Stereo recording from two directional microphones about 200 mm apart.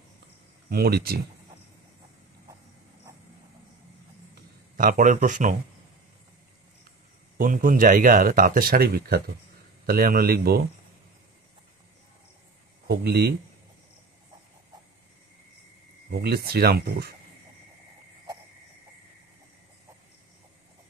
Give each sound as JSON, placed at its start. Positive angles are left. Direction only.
{"t": 0.7, "sound": "speech", "side_deg": -50}
{"t": 4.7, "sound": "speech", "side_deg": -40}
{"t": 7.3, "sound": "speech", "side_deg": -45}
{"t": 12.8, "sound": "speech", "side_deg": -55}
{"t": 16.1, "sound": "speech", "side_deg": -50}